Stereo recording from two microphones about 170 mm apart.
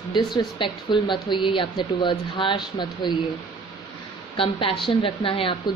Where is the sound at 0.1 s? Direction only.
25° left (ahead or behind).